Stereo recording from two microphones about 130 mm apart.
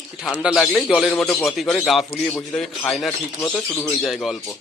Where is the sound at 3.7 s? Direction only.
20° left (ahead or behind).